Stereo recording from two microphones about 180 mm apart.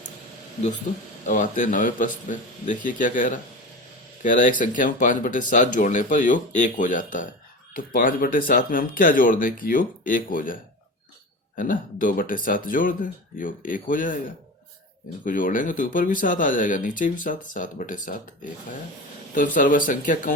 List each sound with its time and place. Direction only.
1.3 s speech: 45° left (ahead or behind)
15.2 s speech: 50° left (ahead or behind)
19.5 s speech: 50° left (ahead or behind)